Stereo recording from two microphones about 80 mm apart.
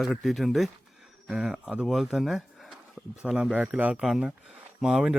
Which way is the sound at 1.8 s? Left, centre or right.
Centre.